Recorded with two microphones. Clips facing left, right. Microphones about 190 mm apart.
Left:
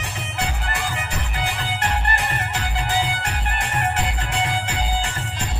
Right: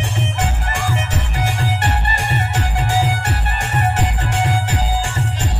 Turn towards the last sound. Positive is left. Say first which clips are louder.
# right 4 dB
turn(degrees=-45)  # may be behind; listen again after turning